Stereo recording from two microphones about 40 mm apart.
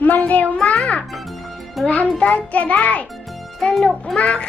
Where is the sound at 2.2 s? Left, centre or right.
Left.